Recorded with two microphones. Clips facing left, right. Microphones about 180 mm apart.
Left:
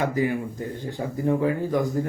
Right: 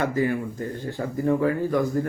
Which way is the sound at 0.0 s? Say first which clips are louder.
Even; 15° left (ahead or behind).